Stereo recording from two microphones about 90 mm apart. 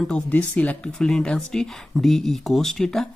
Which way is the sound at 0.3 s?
15° left (ahead or behind).